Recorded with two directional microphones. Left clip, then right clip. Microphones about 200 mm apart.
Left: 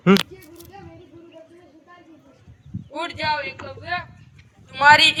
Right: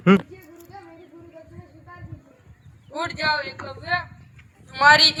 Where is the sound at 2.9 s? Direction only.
20° left (ahead or behind).